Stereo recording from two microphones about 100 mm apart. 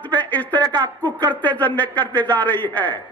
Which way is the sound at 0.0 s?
15° left (ahead or behind).